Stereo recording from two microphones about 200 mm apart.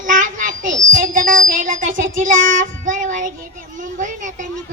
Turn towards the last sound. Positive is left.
turn(degrees=-40)  # may be behind; listen again after turning